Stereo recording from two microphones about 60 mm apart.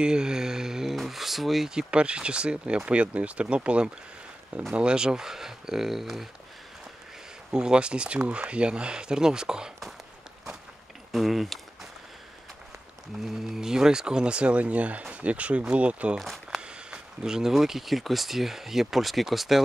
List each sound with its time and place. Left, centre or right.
0.0 s speech: centre
7.5 s speech: centre
11.1 s a sound: centre
13.5 s speech: centre
16.2 s speech: centre